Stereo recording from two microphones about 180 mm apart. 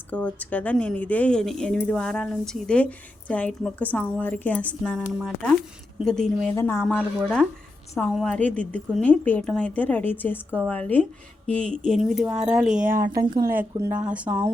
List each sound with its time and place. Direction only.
0.1 s a woman's voice: 10° left (ahead or behind)
13.1 s speech: 20° right (ahead or behind)